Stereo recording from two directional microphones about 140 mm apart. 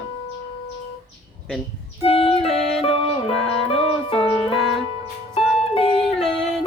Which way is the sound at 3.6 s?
45° left (ahead or behind).